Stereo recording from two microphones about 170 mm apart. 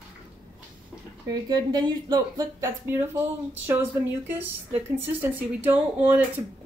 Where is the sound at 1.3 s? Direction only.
25° right (ahead or behind).